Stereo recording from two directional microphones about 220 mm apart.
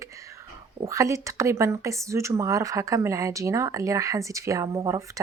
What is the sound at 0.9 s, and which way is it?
Speech, 15° right (ahead or behind).